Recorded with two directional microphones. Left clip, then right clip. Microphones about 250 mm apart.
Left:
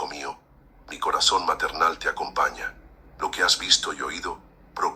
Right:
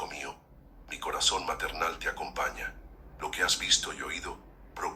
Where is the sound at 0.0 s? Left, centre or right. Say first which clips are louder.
Left 6 dB; centre.